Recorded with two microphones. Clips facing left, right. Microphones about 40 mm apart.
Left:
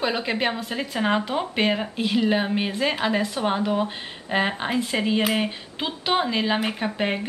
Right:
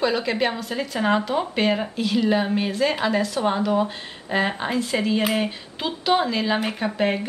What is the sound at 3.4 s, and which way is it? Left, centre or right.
Speech, centre.